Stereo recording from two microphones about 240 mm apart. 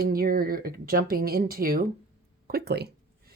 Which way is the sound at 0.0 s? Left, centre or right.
Right.